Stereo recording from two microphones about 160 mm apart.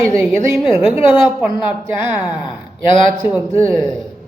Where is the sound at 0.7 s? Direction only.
15° right (ahead or behind).